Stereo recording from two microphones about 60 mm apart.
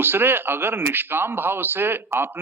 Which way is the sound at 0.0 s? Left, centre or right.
Right.